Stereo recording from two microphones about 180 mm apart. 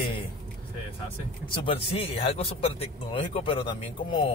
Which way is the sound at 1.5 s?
30° left (ahead or behind).